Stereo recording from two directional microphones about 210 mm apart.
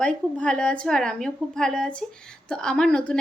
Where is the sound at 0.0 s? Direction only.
5° left (ahead or behind).